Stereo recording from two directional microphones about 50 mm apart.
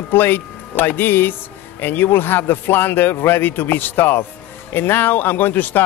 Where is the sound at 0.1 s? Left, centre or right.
Left.